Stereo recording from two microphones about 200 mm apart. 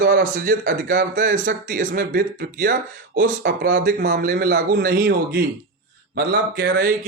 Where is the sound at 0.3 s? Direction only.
45° right (ahead or behind).